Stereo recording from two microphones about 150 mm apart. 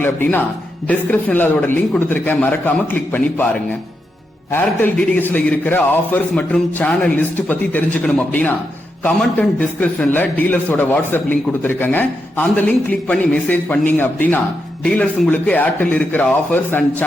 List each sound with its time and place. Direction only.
0.0 s a man's voice: 15° left (ahead or behind)